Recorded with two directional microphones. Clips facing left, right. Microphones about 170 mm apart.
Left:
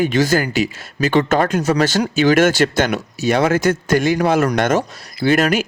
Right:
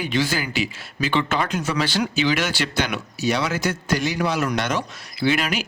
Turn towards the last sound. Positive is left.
turn(degrees=45)  # may be behind; listen again after turning